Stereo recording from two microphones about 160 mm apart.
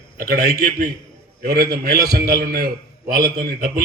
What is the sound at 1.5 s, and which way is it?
A man's voice, 65° right (ahead or behind).